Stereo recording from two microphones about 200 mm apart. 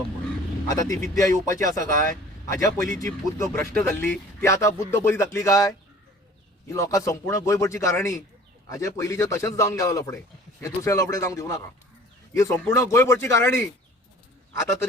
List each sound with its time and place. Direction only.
0.7 s speech: 15° left (ahead or behind)